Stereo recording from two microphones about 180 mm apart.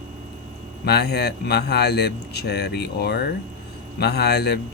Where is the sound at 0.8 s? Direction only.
65° left (ahead or behind).